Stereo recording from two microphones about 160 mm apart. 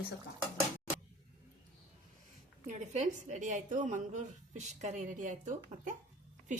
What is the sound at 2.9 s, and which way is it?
A woman's voice, 45° right (ahead or behind).